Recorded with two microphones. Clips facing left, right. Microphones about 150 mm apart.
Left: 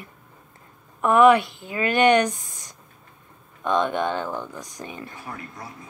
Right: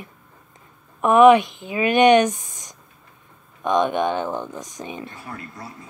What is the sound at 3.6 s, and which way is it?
Speech, 15° right (ahead or behind).